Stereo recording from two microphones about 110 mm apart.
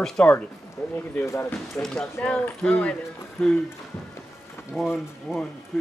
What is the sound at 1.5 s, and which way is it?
Speech, 5° left (ahead or behind).